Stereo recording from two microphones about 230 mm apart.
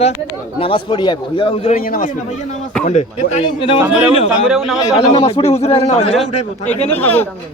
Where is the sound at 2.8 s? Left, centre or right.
Left.